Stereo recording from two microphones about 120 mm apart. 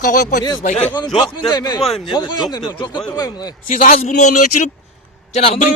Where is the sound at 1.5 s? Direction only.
35° left (ahead or behind).